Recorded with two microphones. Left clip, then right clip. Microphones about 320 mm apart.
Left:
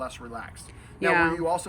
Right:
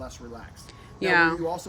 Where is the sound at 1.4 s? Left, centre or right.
Centre.